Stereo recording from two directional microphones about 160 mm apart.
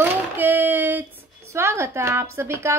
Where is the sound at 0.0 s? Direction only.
10° right (ahead or behind).